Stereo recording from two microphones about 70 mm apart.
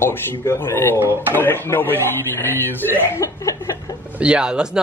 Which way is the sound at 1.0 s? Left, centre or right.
Right.